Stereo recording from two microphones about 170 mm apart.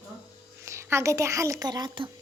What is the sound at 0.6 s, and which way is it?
A child's voice, 15° right (ahead or behind).